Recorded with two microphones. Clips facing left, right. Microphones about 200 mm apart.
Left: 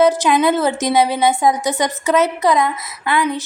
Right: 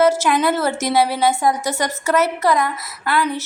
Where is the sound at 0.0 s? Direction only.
15° left (ahead or behind).